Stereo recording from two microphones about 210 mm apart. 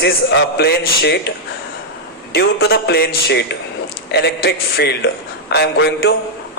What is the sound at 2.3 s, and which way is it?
A man's voice, 50° left (ahead or behind).